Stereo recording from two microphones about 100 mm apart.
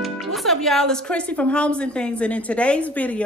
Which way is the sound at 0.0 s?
Centre (ahead or behind).